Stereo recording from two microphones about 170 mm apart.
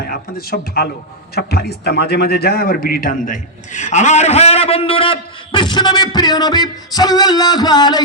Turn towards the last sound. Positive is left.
turn(degrees=25)  # may be behind; listen again after turning